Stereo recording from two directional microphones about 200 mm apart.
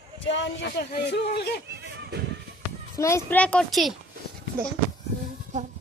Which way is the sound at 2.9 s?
15° left (ahead or behind).